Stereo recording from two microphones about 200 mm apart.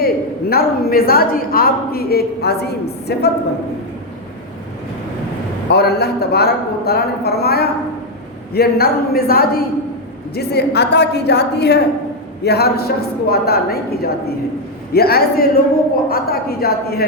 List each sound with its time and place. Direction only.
0.5 s a woman's voice: 50° left (ahead or behind)
5.6 s a woman's voice: 55° left (ahead or behind)